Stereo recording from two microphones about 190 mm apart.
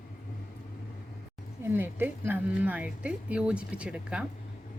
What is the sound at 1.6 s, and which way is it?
Music, 10° right (ahead or behind).